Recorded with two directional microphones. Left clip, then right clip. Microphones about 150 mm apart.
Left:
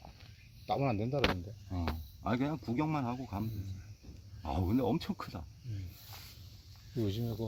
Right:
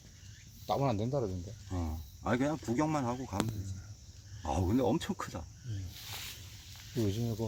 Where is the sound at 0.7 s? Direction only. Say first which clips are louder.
Right 1 dB; 10° left (ahead or behind).